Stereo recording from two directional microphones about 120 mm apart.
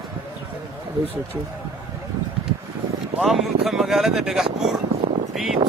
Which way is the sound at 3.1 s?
Centre (ahead or behind).